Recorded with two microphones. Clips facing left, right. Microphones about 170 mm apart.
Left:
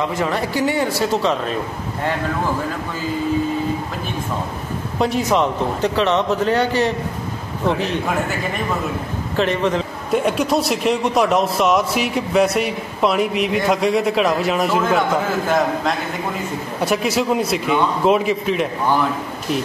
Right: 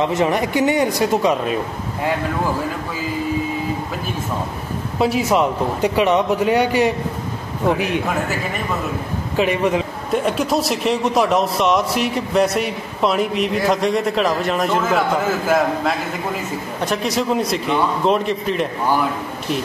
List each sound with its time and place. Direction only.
0.0 s a man's voice: 20° right (ahead or behind)
4.9 s a man's voice: 5° right (ahead or behind)
9.4 s a man's voice: 10° right (ahead or behind)
10.1 s a man's voice: centre (ahead or behind)
16.8 s a man's voice: 5° left (ahead or behind)